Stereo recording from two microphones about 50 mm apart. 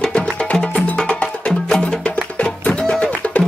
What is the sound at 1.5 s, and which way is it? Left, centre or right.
Music, centre.